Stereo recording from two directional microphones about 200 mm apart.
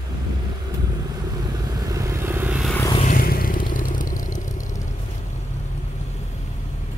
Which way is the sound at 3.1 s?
45° left (ahead or behind).